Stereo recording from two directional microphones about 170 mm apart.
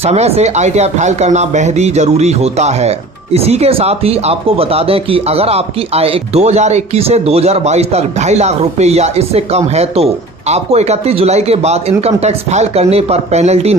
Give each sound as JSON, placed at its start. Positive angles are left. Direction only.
{"t": 0.0, "sound": "speech", "side_deg": -40}